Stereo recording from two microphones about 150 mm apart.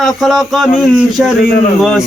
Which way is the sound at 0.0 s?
Centre (ahead or behind).